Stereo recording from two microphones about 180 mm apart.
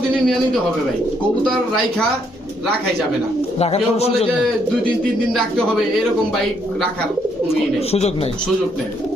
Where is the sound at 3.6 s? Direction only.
35° left (ahead or behind).